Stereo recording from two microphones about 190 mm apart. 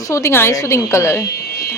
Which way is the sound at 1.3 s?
55° left (ahead or behind).